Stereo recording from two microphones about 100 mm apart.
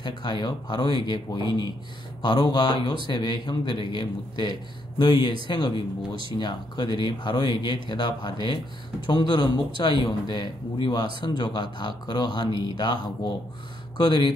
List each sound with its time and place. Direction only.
0.0 s speech: 50° left (ahead or behind)